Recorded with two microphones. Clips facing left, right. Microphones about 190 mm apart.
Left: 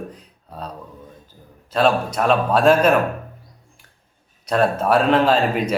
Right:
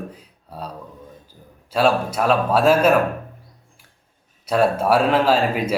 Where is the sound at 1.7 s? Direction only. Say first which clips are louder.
Even; 10° right (ahead or behind).